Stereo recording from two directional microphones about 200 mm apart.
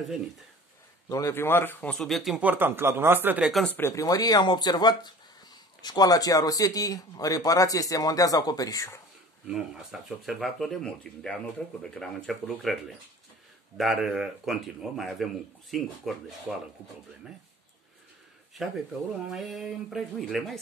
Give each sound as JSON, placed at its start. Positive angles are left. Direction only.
{"t": 1.0, "sound": "a man's voice", "side_deg": 15}
{"t": 9.5, "sound": "speech", "side_deg": -5}
{"t": 13.7, "sound": "speech", "side_deg": 0}
{"t": 18.6, "sound": "speech", "side_deg": 0}